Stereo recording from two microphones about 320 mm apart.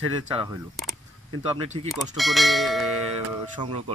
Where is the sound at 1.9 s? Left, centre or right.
Centre.